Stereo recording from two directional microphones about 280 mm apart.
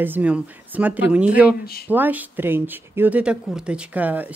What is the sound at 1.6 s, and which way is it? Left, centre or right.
Speech, left.